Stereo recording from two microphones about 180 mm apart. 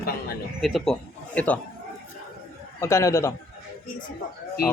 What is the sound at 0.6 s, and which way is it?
Speech, centre (ahead or behind).